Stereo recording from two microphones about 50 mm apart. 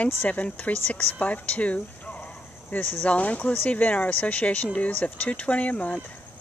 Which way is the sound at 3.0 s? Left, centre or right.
Left.